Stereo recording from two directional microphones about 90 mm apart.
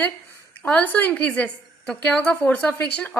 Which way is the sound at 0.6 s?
15° left (ahead or behind).